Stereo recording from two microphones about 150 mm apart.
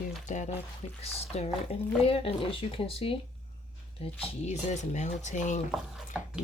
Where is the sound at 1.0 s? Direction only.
45° left (ahead or behind).